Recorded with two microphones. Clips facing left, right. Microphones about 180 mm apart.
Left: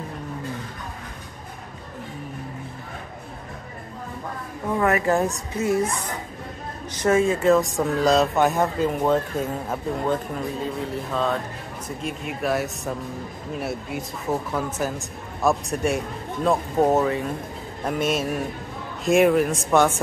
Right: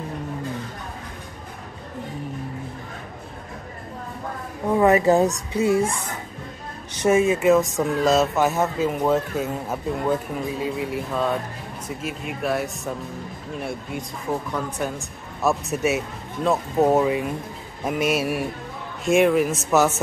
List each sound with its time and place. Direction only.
4.7 s a woman's voice: 20° right (ahead or behind)
7.1 s a man's voice: 10° right (ahead or behind)